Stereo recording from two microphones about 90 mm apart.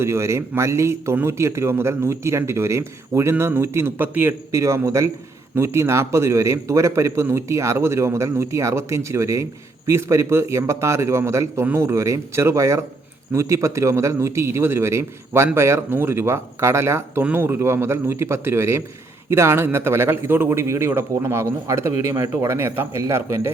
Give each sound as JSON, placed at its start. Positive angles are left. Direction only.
{"t": 0.0, "sound": "a man's voice", "side_deg": -30}
{"t": 4.5, "sound": "a man's voice", "side_deg": -30}